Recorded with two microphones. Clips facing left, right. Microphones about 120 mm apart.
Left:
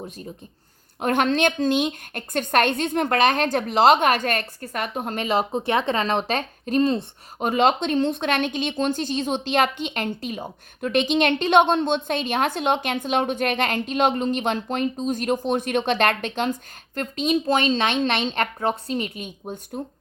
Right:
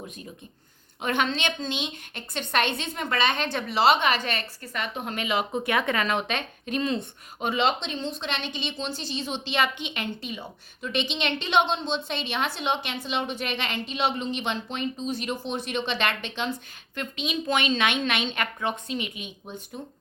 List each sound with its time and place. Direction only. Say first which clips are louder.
1.0 s a woman's voice: left 6 dB; 45° left (ahead or behind)